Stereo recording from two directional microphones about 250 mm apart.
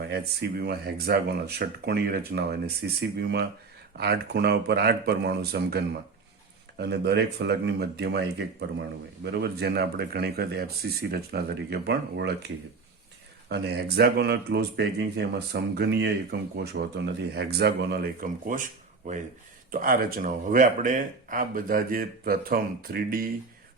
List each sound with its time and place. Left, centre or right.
0.6 s speech: right
13.5 s speech: right
19.7 s speech: right